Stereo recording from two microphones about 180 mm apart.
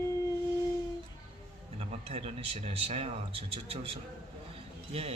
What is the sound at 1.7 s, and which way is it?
Speech, 35° right (ahead or behind).